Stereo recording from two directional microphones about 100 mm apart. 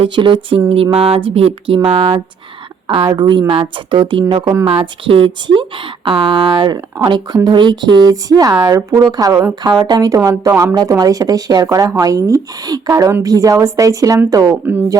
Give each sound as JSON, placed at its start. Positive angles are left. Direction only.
{"t": 0.0, "sound": "a sound", "side_deg": -60}
{"t": 2.8, "sound": "speech", "side_deg": -55}
{"t": 4.6, "sound": "speech", "side_deg": -65}
{"t": 6.7, "sound": "speech", "side_deg": -40}
{"t": 14.6, "sound": "speech", "side_deg": -15}